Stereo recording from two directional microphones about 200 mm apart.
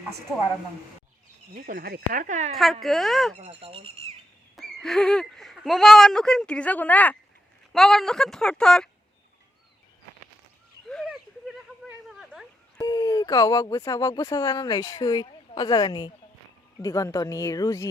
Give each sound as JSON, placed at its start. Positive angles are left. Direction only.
{"t": 1.5, "sound": "speech", "side_deg": -45}
{"t": 2.8, "sound": "speech", "side_deg": 0}
{"t": 3.4, "sound": "speech", "side_deg": -30}
{"t": 4.5, "sound": "speech", "side_deg": 0}
{"t": 10.8, "sound": "a sound", "side_deg": 0}
{"t": 12.8, "sound": "speech", "side_deg": 20}